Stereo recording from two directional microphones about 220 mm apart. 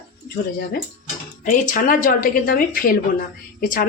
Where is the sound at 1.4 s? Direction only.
40° left (ahead or behind).